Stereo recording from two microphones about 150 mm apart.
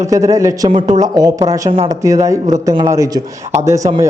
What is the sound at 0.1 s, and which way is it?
A man's voice, 20° right (ahead or behind).